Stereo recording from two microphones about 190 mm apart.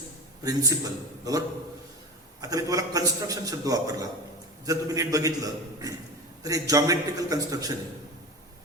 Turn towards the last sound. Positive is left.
turn(degrees=-20)  # may be behind; listen again after turning